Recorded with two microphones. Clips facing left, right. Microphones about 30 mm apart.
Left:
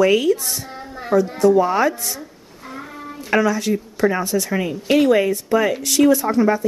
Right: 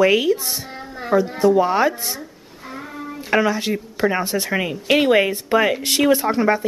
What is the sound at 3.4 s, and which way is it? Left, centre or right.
Speech, right.